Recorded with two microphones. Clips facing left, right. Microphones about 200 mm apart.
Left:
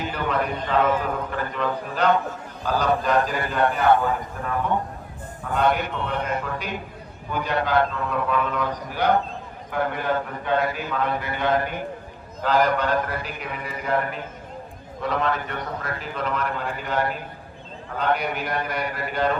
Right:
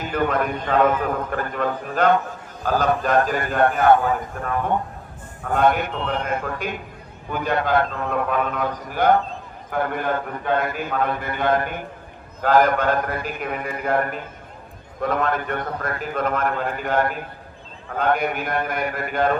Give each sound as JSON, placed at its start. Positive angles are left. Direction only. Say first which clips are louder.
{"t": 0.0, "sound": "a man's voice", "louder": "right 3 dB", "side_deg": -50}